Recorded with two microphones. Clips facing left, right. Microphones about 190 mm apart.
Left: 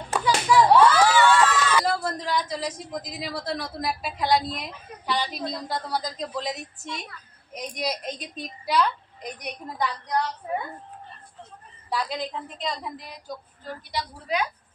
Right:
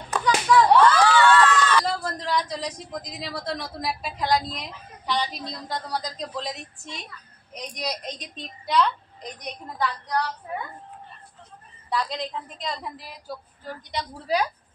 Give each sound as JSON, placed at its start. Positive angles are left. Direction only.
{"t": 0.1, "sound": "a sound", "side_deg": 10}
{"t": 3.1, "sound": "a woman's voice", "side_deg": 5}
{"t": 11.9, "sound": "a woman's voice", "side_deg": 5}
{"t": 14.2, "sound": "a woman's voice", "side_deg": -35}